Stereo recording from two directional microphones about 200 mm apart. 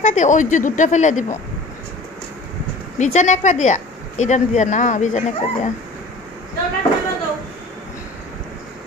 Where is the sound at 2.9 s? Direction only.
35° left (ahead or behind).